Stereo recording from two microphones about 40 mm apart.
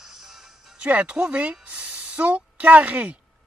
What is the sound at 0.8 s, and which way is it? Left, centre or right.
Speech, right.